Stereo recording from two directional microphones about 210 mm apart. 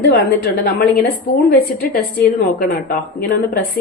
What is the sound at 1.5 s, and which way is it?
A woman's voice, 50° left (ahead or behind).